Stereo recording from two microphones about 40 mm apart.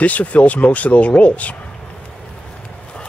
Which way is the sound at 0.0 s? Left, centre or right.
Left.